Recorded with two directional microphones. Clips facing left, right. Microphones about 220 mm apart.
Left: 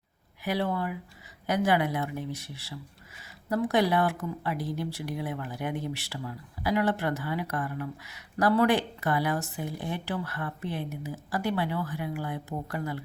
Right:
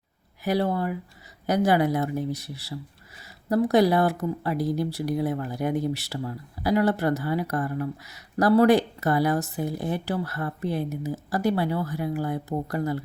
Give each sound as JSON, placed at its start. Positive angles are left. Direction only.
{"t": 0.4, "sound": "speech", "side_deg": -40}